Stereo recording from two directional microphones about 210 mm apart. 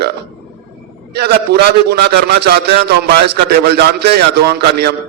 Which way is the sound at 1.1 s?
50° right (ahead or behind).